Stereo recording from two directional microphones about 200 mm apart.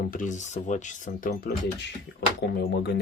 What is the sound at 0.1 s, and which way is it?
Speech, 40° left (ahead or behind).